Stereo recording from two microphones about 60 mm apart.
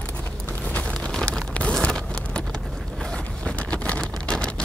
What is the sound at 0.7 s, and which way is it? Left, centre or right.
Vehicle, centre.